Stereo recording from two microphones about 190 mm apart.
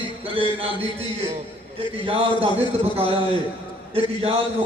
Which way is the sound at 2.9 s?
30° right (ahead or behind).